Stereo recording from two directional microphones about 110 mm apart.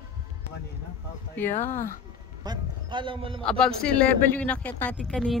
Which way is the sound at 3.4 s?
5° left (ahead or behind).